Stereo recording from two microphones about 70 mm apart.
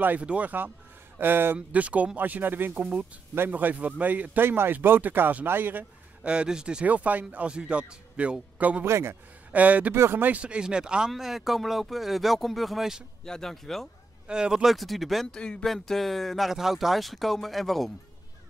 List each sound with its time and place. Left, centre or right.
0.0 s speech: right
8.8 s speech: right
9.5 s speech: right
9.9 s speech: right
10.4 s speech: centre
13.2 s speech: centre
14.2 s speech: centre
15.3 s speech: centre